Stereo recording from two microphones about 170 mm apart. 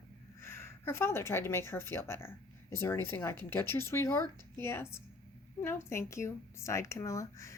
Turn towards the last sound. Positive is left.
turn(degrees=20)  # may be behind; listen again after turning